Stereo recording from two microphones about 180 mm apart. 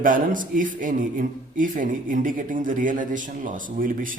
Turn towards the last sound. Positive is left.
turn(degrees=-50)  # may be behind; listen again after turning